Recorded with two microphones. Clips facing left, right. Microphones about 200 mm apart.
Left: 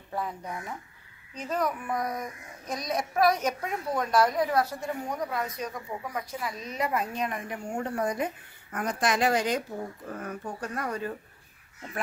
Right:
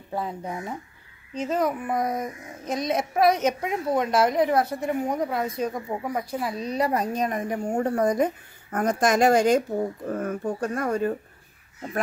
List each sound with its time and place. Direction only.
0.1 s child singing: 25° right (ahead or behind)
8.7 s speech: 45° right (ahead or behind)